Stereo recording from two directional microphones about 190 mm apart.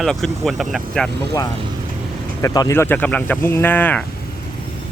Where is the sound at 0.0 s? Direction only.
Centre (ahead or behind).